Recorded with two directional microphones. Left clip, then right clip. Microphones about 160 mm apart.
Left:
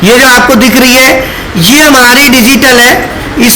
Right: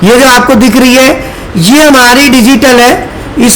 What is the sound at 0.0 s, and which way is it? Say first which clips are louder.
A man's voice: even; 40° right (ahead or behind).